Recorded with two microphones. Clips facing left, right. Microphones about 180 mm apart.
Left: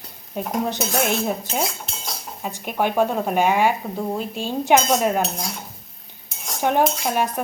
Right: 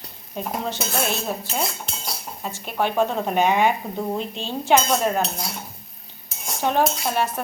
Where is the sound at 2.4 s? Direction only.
15° left (ahead or behind).